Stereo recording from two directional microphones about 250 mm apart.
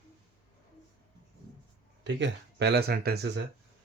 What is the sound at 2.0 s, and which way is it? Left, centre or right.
Speech, right.